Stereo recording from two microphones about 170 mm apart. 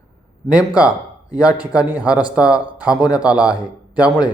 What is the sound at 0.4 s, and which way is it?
Speech, 5° right (ahead or behind).